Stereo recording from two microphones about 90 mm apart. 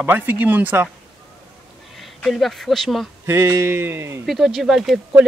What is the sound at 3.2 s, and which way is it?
Speech, 30° right (ahead or behind).